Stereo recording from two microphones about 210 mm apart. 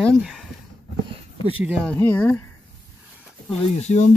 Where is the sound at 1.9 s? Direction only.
10° left (ahead or behind).